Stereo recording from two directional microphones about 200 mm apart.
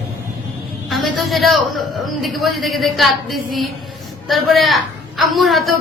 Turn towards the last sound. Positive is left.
turn(degrees=0)  # may be behind; listen again after turning